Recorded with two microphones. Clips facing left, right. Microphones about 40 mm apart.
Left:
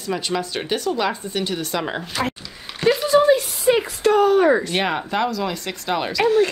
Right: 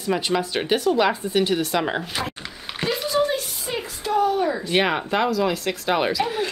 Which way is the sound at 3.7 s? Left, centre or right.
Left.